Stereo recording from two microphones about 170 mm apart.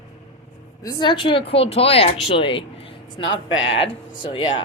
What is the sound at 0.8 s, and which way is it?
Speech, 25° left (ahead or behind).